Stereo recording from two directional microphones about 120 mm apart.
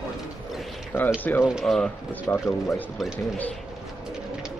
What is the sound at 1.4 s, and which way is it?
Speech, centre (ahead or behind).